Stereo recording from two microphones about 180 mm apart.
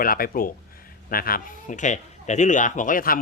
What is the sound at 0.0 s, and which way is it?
Speech, 50° left (ahead or behind).